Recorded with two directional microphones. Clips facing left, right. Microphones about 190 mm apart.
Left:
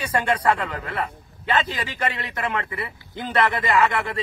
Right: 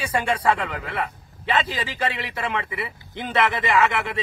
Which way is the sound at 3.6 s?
Centre (ahead or behind).